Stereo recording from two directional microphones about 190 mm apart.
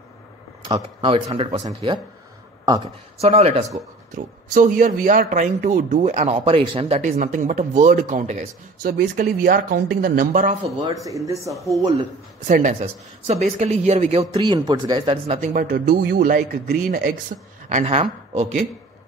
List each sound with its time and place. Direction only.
0.7 s speech: 30° right (ahead or behind)
2.6 s speech: 20° right (ahead or behind)
3.2 s speech: 35° right (ahead or behind)
4.1 s a man's voice: 45° right (ahead or behind)
11.1 s speech: 15° right (ahead or behind)
12.4 s speech: 40° right (ahead or behind)
15.5 s a man's voice: 50° right (ahead or behind)
17.6 s a woman's voice: 35° right (ahead or behind)